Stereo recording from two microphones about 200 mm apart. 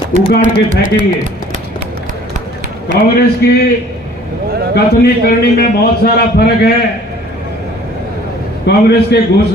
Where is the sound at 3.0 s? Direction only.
50° left (ahead or behind).